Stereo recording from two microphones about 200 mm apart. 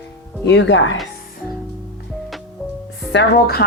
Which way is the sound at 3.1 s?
55° left (ahead or behind).